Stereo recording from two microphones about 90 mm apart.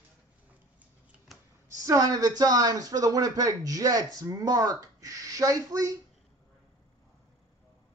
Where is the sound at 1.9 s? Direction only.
40° right (ahead or behind).